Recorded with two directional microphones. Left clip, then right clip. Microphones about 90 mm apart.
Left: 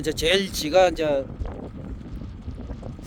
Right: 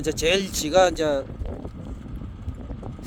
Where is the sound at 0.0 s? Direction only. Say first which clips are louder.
Even; centre (ahead or behind).